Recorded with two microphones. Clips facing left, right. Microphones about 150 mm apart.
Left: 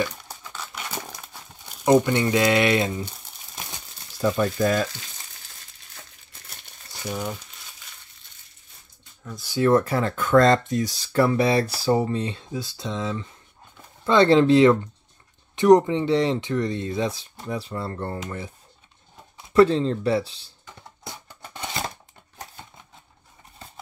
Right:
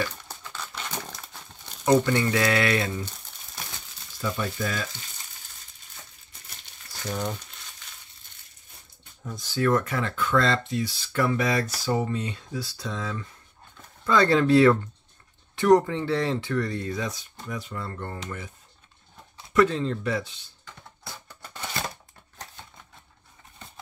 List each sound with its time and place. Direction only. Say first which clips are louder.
0.0 s crumpling: left 3 dB; 10° left (ahead or behind)
1.9 s speech: left 3 dB; 15° left (ahead or behind)
4.2 s speech: left 8 dB; 45° left (ahead or behind)
7.0 s speech: left 1 dB; 10° left (ahead or behind)
9.6 s speech: left 5 dB; 30° left (ahead or behind)
19.5 s speech: left 5 dB; 30° left (ahead or behind)
21.0 s music: left 3 dB; 20° left (ahead or behind)